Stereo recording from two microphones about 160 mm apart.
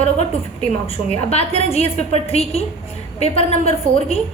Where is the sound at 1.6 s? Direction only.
40° left (ahead or behind).